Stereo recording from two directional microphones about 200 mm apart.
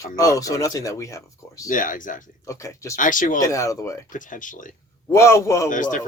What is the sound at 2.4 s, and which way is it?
Speech, 15° left (ahead or behind).